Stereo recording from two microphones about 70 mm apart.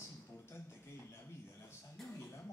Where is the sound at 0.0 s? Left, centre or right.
Left.